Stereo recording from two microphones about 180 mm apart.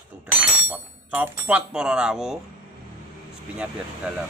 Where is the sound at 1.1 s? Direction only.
10° right (ahead or behind).